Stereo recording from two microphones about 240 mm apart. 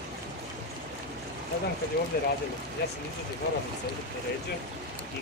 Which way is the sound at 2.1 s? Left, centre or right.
Left.